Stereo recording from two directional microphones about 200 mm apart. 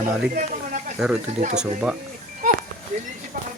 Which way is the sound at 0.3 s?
40° right (ahead or behind).